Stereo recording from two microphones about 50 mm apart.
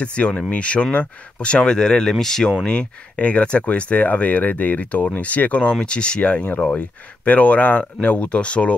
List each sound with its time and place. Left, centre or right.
0.0 s speech: left
2.6 s speech: left